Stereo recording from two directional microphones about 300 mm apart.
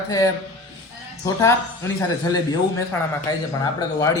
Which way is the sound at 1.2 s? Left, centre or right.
Centre.